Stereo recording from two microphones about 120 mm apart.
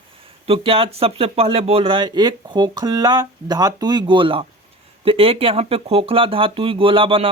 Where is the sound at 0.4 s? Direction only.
55° right (ahead or behind).